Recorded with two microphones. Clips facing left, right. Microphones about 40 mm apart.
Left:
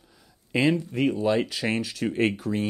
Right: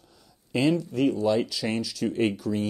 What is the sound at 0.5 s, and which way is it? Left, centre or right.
Speech, left.